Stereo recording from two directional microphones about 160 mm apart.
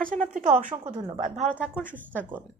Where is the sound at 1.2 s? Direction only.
45° right (ahead or behind).